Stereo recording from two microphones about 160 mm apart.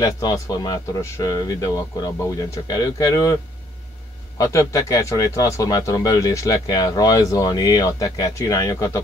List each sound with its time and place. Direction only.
0.0 s speech: 25° left (ahead or behind)
4.4 s speech: 20° left (ahead or behind)